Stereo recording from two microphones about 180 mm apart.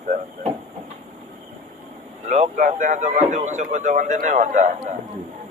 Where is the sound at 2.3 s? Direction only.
40° right (ahead or behind).